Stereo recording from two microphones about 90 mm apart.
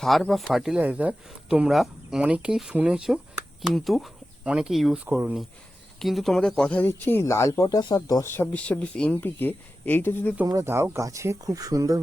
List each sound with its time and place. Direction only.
0.0 s speech: centre (ahead or behind)
0.8 s speech: 20° right (ahead or behind)
3.7 s speech: centre (ahead or behind)
6.0 s speech: centre (ahead or behind)
6.7 s speech: 20° left (ahead or behind); by 8.3 s 35° left (ahead or behind)
8.3 s speech: 20° left (ahead or behind)
10.4 s speech: 40° right (ahead or behind)
10.7 s speech: 25° right (ahead or behind)